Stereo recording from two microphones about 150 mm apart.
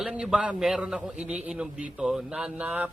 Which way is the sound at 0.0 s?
5° right (ahead or behind).